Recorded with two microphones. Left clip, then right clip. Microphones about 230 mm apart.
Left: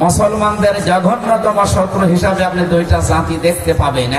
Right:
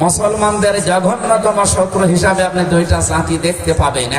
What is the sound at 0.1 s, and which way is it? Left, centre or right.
A man's voice, right.